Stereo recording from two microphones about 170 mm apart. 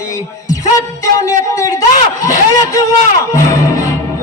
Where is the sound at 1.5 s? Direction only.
20° left (ahead or behind).